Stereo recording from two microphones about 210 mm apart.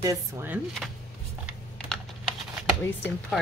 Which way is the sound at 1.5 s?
Centre (ahead or behind).